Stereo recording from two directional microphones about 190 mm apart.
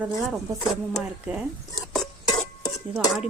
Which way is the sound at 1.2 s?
5° right (ahead or behind).